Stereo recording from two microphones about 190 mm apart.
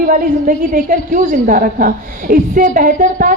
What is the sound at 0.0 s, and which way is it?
A woman's voice, 45° right (ahead or behind).